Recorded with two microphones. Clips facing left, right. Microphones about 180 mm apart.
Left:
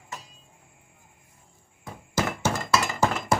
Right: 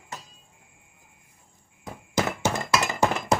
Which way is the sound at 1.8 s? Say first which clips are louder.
Right 1 dB; 15° right (ahead or behind).